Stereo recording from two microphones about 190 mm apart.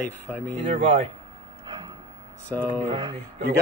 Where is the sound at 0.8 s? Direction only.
30° right (ahead or behind).